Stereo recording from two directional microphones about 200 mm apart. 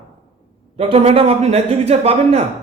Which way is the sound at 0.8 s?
30° right (ahead or behind).